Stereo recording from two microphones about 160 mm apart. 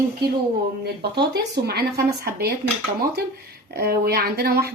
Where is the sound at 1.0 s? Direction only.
90° right.